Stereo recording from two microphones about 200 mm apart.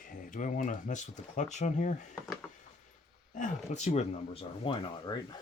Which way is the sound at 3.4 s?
35° left (ahead or behind).